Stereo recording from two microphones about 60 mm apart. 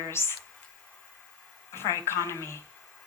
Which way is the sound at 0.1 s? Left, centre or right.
Left.